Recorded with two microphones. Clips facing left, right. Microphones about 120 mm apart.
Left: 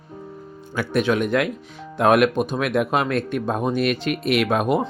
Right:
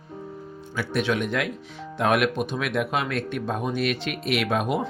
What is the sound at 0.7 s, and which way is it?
Speech, 50° left (ahead or behind).